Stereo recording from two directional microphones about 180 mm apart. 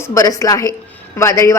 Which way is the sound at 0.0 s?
20° left (ahead or behind).